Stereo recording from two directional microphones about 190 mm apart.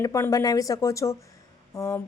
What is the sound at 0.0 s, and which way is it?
A woman's voice, 15° left (ahead or behind).